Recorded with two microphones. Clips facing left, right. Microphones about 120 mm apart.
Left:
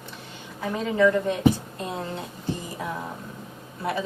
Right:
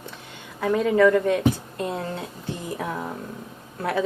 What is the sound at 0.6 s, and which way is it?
Speech, 60° right (ahead or behind).